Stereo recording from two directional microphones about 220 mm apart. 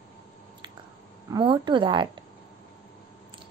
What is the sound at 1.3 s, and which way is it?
Speech, 20° right (ahead or behind).